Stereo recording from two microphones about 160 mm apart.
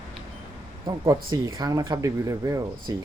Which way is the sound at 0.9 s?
20° right (ahead or behind).